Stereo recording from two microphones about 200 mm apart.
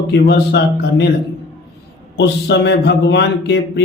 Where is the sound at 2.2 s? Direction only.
60° left (ahead or behind).